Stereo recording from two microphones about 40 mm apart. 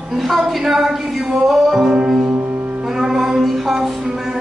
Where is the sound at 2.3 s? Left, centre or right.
Right.